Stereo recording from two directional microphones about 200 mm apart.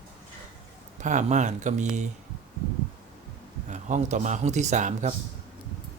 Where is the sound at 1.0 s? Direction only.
40° right (ahead or behind).